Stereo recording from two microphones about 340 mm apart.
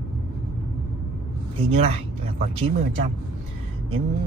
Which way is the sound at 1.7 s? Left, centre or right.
Centre.